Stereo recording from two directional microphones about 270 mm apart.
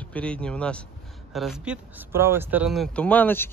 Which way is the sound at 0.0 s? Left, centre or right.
Centre.